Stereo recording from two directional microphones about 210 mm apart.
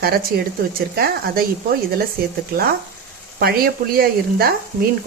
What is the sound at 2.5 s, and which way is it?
Speech, 50° right (ahead or behind).